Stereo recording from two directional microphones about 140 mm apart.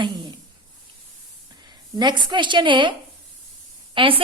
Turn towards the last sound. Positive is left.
turn(degrees=-40)  # may be behind; listen again after turning